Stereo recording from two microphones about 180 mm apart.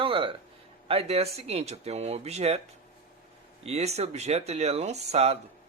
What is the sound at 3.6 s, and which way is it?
Speech, 35° right (ahead or behind).